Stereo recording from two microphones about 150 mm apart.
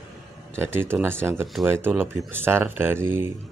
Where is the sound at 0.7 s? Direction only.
15° right (ahead or behind).